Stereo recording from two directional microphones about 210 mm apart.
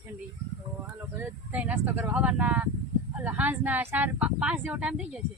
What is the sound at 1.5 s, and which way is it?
Speech, 5° right (ahead or behind).